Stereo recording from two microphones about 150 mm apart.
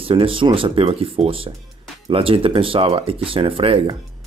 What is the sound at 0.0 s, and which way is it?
Speech, 35° right (ahead or behind).